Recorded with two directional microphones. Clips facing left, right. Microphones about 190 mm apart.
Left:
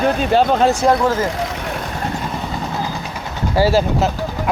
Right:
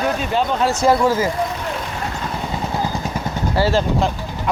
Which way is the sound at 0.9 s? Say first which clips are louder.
Even; 10° right (ahead or behind).